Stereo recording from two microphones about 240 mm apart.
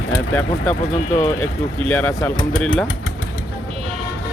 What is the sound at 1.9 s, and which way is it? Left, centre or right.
Speech, centre.